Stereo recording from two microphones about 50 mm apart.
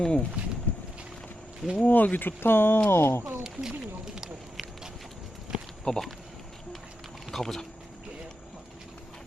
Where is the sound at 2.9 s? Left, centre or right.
Left.